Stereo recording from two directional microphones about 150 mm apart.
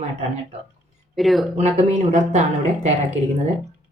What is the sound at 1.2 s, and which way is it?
Speech, centre (ahead or behind).